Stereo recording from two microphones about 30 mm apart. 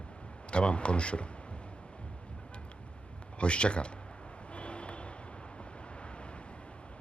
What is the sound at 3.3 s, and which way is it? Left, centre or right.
Speech, left.